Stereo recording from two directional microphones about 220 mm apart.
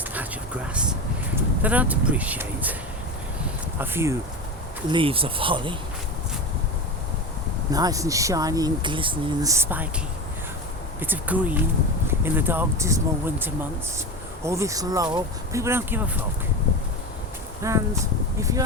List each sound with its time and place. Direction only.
0.1 s a sound: 5° right (ahead or behind)
1.6 s speech: 5° right (ahead or behind)
3.8 s speech: 10° right (ahead or behind)
4.9 s speech: 25° right (ahead or behind)
7.7 s speech: 15° right (ahead or behind)
11.0 s speech: 10° right (ahead or behind)
17.6 s speech: 15° right (ahead or behind)